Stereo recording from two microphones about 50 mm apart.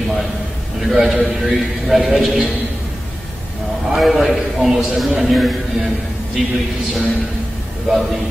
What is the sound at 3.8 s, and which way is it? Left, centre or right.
A man's voice, centre.